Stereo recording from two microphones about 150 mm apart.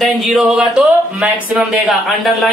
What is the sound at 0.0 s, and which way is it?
Speech, centre (ahead or behind).